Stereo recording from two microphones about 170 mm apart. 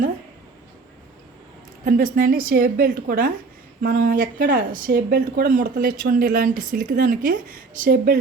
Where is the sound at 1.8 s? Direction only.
50° right (ahead or behind).